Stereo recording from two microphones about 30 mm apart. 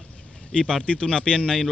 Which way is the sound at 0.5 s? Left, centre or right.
Left.